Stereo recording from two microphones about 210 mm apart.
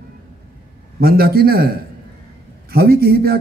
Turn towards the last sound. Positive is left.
turn(degrees=-45)  # may be behind; listen again after turning